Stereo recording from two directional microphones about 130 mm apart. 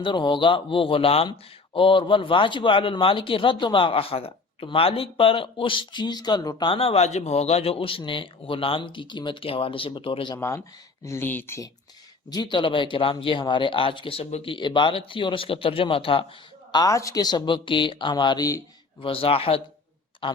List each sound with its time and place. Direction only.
0.0 s speech: 40° left (ahead or behind)
10.3 s speech: 25° left (ahead or behind)
12.3 s speech: 35° left (ahead or behind); by 14.5 s 55° left (ahead or behind)
14.5 s speech: 40° left (ahead or behind)
16.7 s speech: 25° left (ahead or behind)
19.0 s a man's voice: 45° left (ahead or behind)